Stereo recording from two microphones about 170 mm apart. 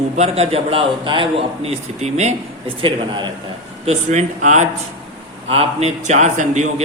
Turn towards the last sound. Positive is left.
turn(degrees=-45)  # may be behind; listen again after turning